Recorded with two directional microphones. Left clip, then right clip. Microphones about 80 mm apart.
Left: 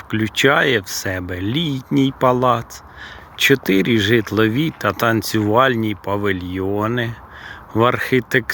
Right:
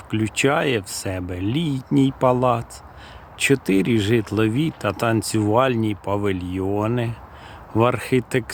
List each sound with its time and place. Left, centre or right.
0.1 s speech: right